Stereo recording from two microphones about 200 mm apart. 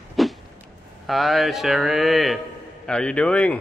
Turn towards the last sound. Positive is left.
turn(degrees=5)  # may be behind; listen again after turning